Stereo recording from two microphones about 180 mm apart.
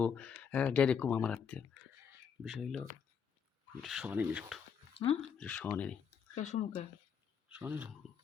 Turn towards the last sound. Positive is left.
turn(degrees=-10)  # may be behind; listen again after turning